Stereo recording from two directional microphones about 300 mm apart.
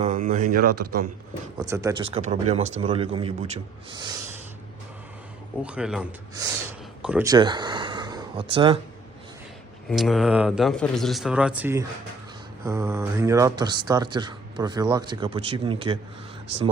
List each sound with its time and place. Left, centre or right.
0.0 s speech: right
0.6 s a man's voice: right
1.5 s speech: centre
5.6 s speech: centre
9.9 s speech: centre